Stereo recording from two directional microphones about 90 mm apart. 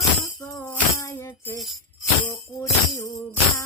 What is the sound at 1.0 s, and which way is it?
Music, 35° left (ahead or behind).